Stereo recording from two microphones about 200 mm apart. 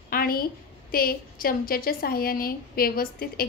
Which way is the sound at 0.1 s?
45° left (ahead or behind).